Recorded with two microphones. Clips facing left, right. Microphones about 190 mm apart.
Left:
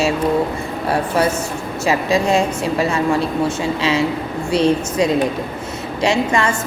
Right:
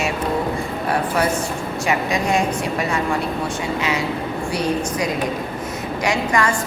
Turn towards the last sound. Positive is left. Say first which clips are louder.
# left 3 dB
turn(degrees=25)  # may be behind; listen again after turning